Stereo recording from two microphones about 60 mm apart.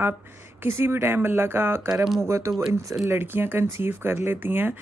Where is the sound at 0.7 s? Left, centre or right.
Right.